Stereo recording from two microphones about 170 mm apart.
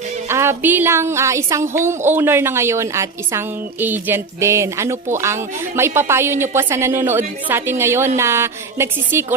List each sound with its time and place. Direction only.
0.3 s a woman's voice: 15° right (ahead or behind)